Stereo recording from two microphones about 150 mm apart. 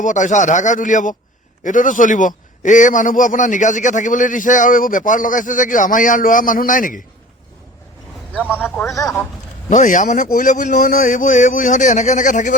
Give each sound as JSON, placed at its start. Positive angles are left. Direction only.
{"t": 0.0, "sound": "a man's voice", "side_deg": 55}
{"t": 8.4, "sound": "speech", "side_deg": -10}
{"t": 8.7, "sound": "speech", "side_deg": 5}
{"t": 9.0, "sound": "speech", "side_deg": 20}
{"t": 9.6, "sound": "a man's voice", "side_deg": 60}